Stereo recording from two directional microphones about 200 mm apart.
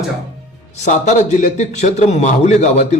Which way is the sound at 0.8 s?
35° left (ahead or behind).